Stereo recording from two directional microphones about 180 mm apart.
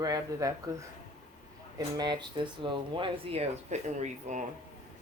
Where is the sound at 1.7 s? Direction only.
20° right (ahead or behind).